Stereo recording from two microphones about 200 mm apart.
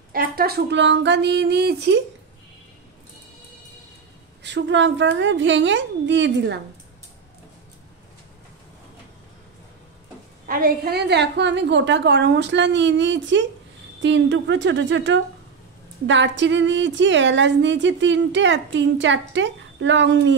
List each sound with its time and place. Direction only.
0.1 s speech: 45° right (ahead or behind)
4.4 s speech: 60° right (ahead or behind)
10.4 s speech: 45° right (ahead or behind); by 20.3 s 65° right (ahead or behind)